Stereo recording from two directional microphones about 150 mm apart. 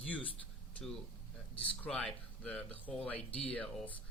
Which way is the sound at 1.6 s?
10° left (ahead or behind).